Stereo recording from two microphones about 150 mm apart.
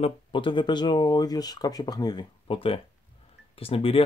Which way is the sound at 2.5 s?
35° left (ahead or behind).